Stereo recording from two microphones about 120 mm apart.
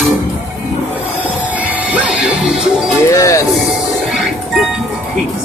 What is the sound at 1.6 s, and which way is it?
Music, 10° right (ahead or behind).